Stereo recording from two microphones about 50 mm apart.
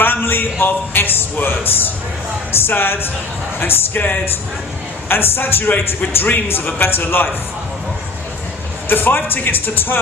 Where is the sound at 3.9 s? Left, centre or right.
Left.